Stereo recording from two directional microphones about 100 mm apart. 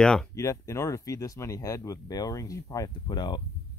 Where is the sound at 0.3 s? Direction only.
30° left (ahead or behind).